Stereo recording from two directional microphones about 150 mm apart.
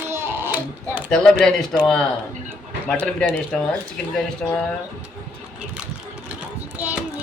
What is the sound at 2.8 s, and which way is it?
Speech, 10° left (ahead or behind).